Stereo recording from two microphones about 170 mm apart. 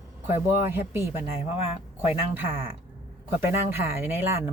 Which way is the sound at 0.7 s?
15° right (ahead or behind).